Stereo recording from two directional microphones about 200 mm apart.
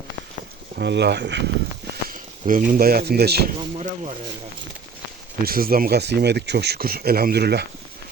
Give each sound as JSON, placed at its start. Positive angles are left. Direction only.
{"t": 0.8, "sound": "speech", "side_deg": -55}
{"t": 2.0, "sound": "speech", "side_deg": -45}
{"t": 3.6, "sound": "speech", "side_deg": -30}
{"t": 5.5, "sound": "speech", "side_deg": -45}